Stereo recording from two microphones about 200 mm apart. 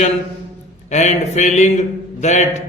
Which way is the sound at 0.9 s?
35° left (ahead or behind).